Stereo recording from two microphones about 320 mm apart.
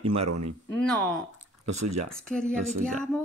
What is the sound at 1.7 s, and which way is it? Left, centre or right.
Speech, right.